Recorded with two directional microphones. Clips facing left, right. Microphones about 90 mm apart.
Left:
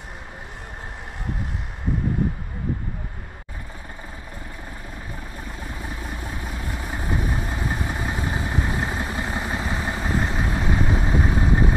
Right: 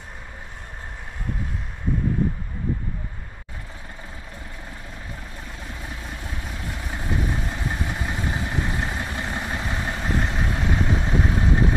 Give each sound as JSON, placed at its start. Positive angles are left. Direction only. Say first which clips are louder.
{"t": 5.6, "sound": "vehicle", "louder": "left 3 dB", "side_deg": 5}
{"t": 8.1, "sound": "vehicle", "louder": "left 1 dB", "side_deg": 20}
{"t": 9.1, "sound": "vehicle", "louder": "left 2 dB", "side_deg": 5}